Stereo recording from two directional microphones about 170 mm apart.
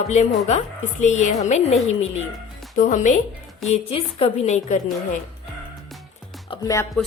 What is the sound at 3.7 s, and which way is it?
A woman's voice, 35° left (ahead or behind).